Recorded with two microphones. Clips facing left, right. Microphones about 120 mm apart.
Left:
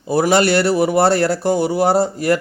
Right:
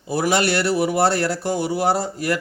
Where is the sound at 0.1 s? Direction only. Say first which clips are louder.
Left 5 dB; 40° left (ahead or behind).